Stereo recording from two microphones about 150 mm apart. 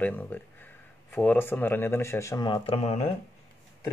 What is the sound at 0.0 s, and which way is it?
Speech, 10° left (ahead or behind).